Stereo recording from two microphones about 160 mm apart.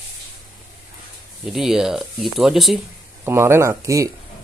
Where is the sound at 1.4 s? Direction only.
Centre (ahead or behind).